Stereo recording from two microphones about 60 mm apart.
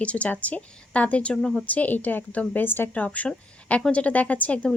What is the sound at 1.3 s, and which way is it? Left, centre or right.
Speech, centre.